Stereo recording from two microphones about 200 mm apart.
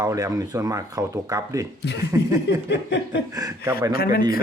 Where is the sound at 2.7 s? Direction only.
65° left (ahead or behind).